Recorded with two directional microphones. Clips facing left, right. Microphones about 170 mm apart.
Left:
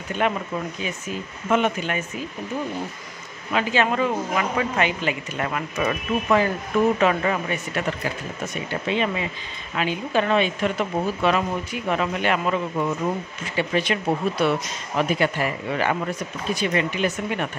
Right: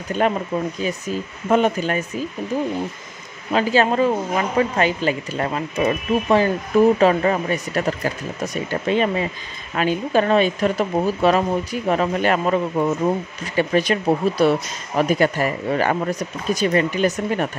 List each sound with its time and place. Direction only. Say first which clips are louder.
0.2 s speech: right 4 dB; 35° right (ahead or behind)
3.5 s speech: right 4 dB; 35° right (ahead or behind)